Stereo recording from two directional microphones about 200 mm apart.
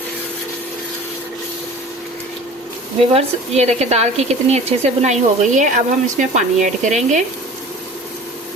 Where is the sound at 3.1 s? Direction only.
35° right (ahead or behind).